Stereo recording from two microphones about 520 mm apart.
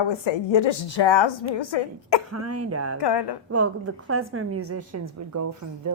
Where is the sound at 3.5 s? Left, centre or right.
Right.